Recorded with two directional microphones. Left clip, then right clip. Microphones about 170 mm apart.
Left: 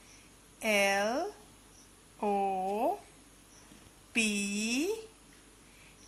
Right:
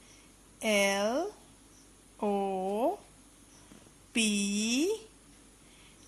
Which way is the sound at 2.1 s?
40° right (ahead or behind).